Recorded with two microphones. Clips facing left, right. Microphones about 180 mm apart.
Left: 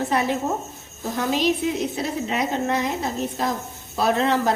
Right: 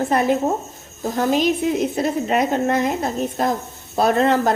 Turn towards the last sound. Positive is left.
turn(degrees=-50)  # may be behind; listen again after turning